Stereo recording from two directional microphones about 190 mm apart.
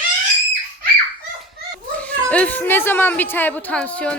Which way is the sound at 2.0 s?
5° left (ahead or behind).